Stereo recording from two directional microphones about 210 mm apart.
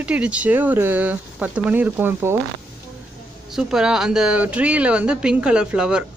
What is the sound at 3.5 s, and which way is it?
Speech, centre (ahead or behind).